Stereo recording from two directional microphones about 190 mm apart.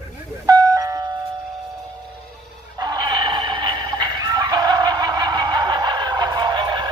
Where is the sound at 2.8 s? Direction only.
20° right (ahead or behind).